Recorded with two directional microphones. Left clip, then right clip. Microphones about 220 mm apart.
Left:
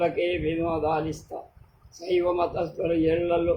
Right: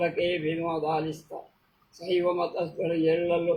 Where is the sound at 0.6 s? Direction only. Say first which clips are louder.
Left 3 dB; 15° left (ahead or behind).